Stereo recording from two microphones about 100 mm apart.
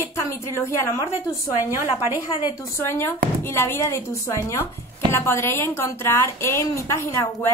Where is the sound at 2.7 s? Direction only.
25° left (ahead or behind).